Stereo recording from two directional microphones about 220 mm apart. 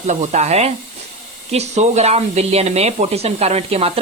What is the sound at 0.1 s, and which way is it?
Speech, 30° right (ahead or behind).